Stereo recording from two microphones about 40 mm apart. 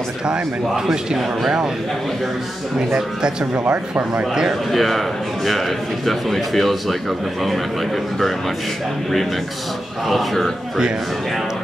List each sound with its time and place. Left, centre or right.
0.3 s a man's voice: centre
2.9 s speech: right
3.5 s speech: right
4.1 s speech: right
4.6 s a man's voice: centre